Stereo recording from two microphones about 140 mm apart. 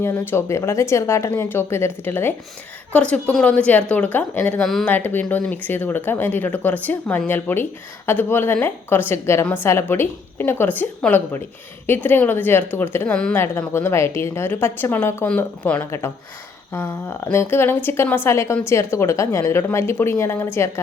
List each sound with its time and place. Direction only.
0.0 s speech: 15° left (ahead or behind)
4.6 s speech: centre (ahead or behind)
4.9 s speech: 15° left (ahead or behind)
13.1 s speech: 5° left (ahead or behind)
13.3 s speech: 15° left (ahead or behind)